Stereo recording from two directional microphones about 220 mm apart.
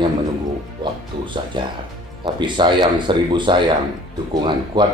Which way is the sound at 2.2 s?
20° right (ahead or behind).